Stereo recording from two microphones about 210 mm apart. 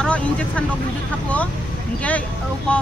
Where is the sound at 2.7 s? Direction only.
5° left (ahead or behind).